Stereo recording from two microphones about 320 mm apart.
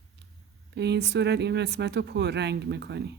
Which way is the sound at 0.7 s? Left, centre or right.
Right.